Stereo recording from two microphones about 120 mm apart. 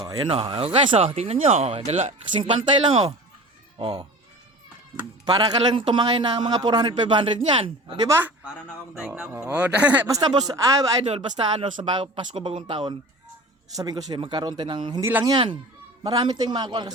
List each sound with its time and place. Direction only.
0.0 s a man's voice: 35° right (ahead or behind)
0.3 s speech: 45° right (ahead or behind)
0.6 s speech: 55° right (ahead or behind)
2.4 s speech: 45° right (ahead or behind)
5.2 s a man's voice: 35° right (ahead or behind)
8.0 s speech: 20° right (ahead or behind)
9.0 s speech: 5° right (ahead or behind)
10.1 s speech: 30° right (ahead or behind)
11.6 s a man's voice: 40° right (ahead or behind)
15.0 s a man's voice: 25° right (ahead or behind)